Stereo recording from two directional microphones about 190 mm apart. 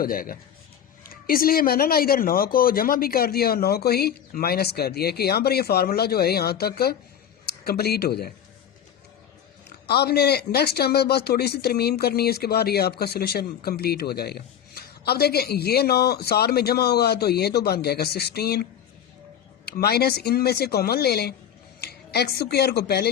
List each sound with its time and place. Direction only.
0.0 s a man's voice: 50° left (ahead or behind)
9.8 s speech: 55° left (ahead or behind)